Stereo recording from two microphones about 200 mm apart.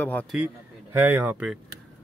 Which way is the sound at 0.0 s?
10° left (ahead or behind).